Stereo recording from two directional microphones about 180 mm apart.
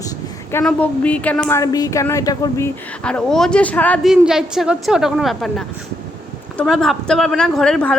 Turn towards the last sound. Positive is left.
turn(degrees=5)  # may be behind; listen again after turning